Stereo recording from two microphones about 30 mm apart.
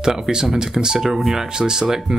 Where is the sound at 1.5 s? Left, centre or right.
Right.